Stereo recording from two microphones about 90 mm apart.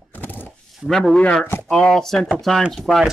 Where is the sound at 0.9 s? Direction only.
Centre (ahead or behind).